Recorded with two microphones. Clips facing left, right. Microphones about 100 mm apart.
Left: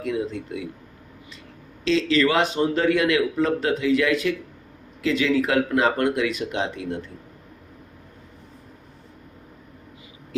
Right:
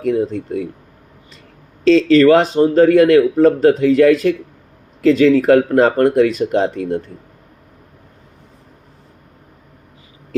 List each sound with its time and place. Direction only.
0.0 s speech: 45° right (ahead or behind)
1.8 s speech: 40° right (ahead or behind)